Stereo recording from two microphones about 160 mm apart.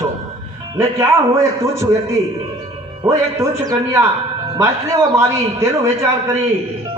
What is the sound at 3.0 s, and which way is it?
A man's voice, 20° right (ahead or behind).